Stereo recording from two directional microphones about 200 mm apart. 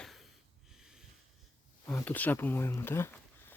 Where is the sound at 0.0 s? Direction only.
Centre (ahead or behind).